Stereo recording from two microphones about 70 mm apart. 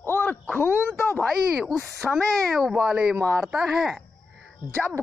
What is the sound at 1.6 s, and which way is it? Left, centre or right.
Speech, centre.